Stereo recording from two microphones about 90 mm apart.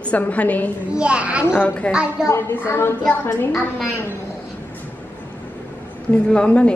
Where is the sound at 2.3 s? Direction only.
30° left (ahead or behind).